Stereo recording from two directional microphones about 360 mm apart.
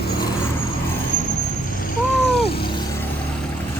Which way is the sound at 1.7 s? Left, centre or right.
Left.